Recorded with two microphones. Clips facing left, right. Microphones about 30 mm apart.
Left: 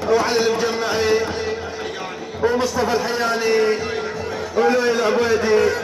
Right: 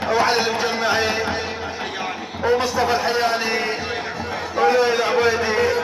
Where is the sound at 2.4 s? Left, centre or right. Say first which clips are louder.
Even; centre.